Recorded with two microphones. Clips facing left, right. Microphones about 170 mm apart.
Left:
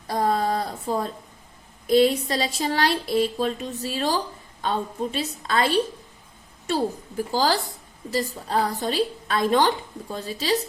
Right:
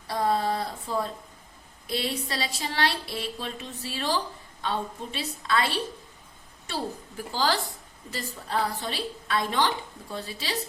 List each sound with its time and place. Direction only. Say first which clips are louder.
0.1 s a sound: left 3 dB; 45° left (ahead or behind)
4.6 s a woman's voice: left 5 dB; 40° left (ahead or behind)
7.3 s a woman's voice: left 4 dB; 40° left (ahead or behind)